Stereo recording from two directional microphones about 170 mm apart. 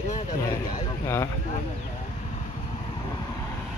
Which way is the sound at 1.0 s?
15° left (ahead or behind).